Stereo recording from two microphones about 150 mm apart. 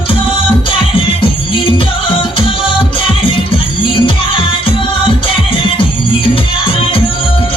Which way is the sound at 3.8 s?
35° left (ahead or behind).